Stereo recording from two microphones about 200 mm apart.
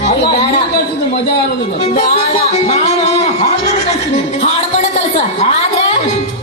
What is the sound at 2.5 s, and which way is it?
Speech, 35° left (ahead or behind).